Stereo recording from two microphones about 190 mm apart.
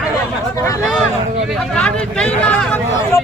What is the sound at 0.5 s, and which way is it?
Speech, 15° left (ahead or behind).